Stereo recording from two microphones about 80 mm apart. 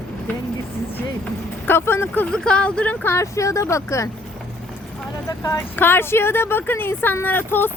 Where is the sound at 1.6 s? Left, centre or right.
Left.